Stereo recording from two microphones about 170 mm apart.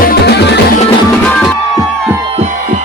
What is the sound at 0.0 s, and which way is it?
Music, 65° left (ahead or behind).